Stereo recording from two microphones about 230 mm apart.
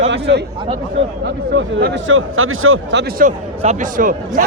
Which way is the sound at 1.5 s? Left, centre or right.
Right.